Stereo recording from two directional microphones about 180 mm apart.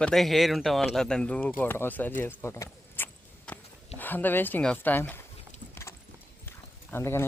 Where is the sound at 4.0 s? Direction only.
10° left (ahead or behind).